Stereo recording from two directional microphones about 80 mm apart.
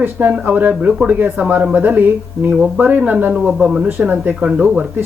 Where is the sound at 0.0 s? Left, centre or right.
Right.